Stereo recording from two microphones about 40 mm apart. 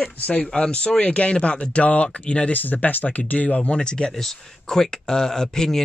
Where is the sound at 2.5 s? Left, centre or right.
Left.